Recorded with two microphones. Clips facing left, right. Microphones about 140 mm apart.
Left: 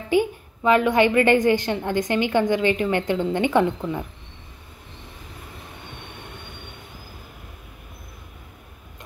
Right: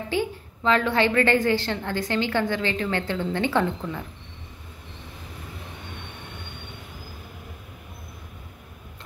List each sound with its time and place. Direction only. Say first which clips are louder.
0.1 s a woman's voice: left 7 dB; 15° left (ahead or behind)